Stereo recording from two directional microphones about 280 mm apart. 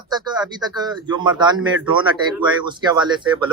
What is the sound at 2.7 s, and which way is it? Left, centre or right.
Speech, centre.